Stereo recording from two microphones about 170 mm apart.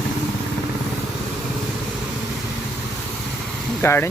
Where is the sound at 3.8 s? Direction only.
15° left (ahead or behind).